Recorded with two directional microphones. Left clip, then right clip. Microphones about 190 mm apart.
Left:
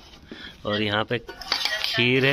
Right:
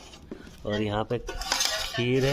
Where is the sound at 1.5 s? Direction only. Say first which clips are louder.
Left 2 dB; 65° right (ahead or behind).